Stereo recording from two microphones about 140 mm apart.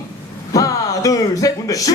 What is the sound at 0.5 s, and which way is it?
Music, 25° left (ahead or behind).